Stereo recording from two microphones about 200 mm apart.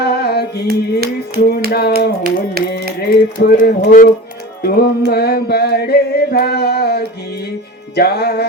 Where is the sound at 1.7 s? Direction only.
55° left (ahead or behind).